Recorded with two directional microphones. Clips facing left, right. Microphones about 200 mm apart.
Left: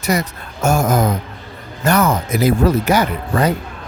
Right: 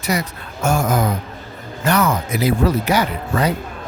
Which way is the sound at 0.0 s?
45° left (ahead or behind).